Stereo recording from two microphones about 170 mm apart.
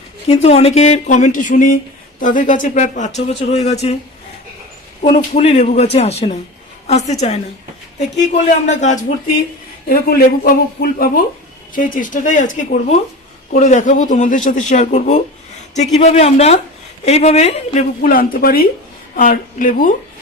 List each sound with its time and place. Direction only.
0.3 s speech: 40° left (ahead or behind)
5.3 s a man's voice: 40° left (ahead or behind)
9.9 s a man's voice: 60° left (ahead or behind); by 17.8 s 40° left (ahead or behind)
18.0 s speech: 55° left (ahead or behind)